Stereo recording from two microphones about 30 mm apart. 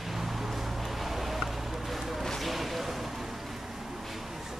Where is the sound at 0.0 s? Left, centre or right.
Centre.